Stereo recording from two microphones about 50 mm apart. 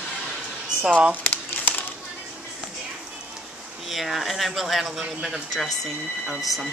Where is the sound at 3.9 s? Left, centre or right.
Centre.